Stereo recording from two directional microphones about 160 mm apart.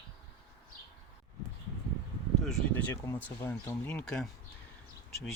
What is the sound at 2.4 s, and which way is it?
Speech, 5° left (ahead or behind).